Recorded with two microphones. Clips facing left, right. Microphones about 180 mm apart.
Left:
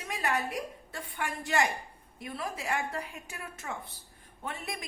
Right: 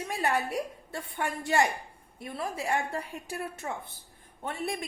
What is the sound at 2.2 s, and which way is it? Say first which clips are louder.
A woman's voice: right 3 dB; 30° right (ahead or behind).